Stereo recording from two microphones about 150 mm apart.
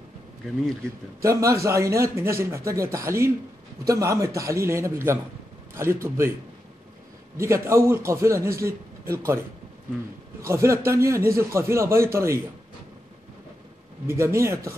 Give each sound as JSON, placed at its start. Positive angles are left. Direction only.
{"t": 1.2, "sound": "a man's voice", "side_deg": -20}
{"t": 7.3, "sound": "a man's voice", "side_deg": -20}
{"t": 10.4, "sound": "a man's voice", "side_deg": -20}
{"t": 14.0, "sound": "a man's voice", "side_deg": -20}